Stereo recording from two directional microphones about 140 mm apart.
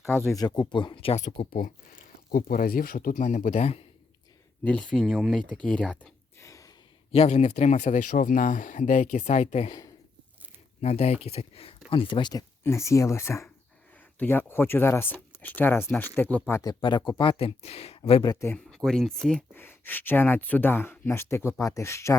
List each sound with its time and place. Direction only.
0.3 s speech: 30° left (ahead or behind)
1.1 s speech: 60° left (ahead or behind)
4.6 s speech: 5° left (ahead or behind)
6.4 s a sound: 20° left (ahead or behind)
7.1 s speech: 50° left (ahead or behind)
10.8 s speech: 50° left (ahead or behind)
12.3 s speech: 20° left (ahead or behind)
16.6 s speech: 30° left (ahead or behind)
18.2 s speech: 25° left (ahead or behind)
18.7 s speech: 5° left (ahead or behind)
19.5 s speech: 15° left (ahead or behind)